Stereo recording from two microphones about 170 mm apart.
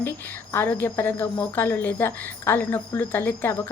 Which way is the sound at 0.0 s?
15° left (ahead or behind).